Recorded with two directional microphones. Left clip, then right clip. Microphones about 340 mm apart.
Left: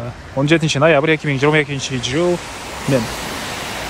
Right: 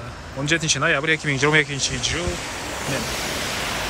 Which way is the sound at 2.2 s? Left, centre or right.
Left.